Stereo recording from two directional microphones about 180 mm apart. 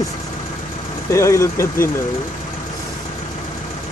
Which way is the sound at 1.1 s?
15° left (ahead or behind).